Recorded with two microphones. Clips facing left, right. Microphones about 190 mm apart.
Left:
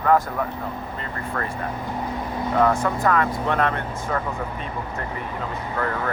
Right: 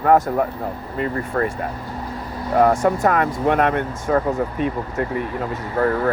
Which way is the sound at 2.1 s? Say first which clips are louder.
Left 2 dB; 20° left (ahead or behind).